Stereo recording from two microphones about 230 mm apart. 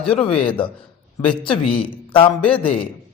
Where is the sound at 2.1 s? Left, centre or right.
Left.